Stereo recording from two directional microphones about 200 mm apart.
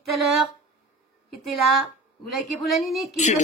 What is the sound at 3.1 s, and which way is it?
Speech, 35° left (ahead or behind).